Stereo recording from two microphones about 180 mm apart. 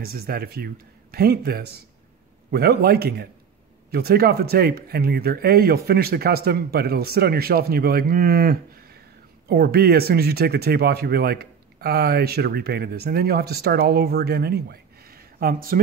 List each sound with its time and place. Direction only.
0.0 s speech: 55° right (ahead or behind)